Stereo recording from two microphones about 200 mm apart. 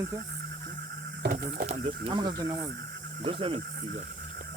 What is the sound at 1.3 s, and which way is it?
Speech, 40° right (ahead or behind).